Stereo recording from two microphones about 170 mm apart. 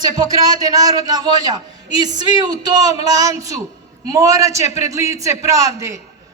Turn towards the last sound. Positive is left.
turn(degrees=-20)  # may be behind; listen again after turning